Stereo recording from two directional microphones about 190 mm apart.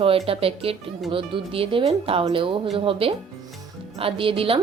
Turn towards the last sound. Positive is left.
turn(degrees=-30)  # may be behind; listen again after turning